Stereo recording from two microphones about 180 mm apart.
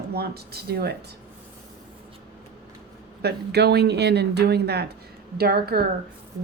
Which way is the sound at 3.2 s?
65° right (ahead or behind).